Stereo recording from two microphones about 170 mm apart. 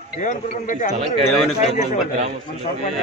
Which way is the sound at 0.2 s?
50° left (ahead or behind).